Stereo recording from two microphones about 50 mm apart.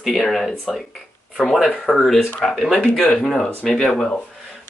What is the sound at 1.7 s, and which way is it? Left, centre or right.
Speech, left.